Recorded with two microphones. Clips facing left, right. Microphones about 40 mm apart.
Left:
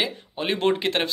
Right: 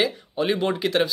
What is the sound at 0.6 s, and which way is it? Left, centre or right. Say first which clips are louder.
Speech: even; left.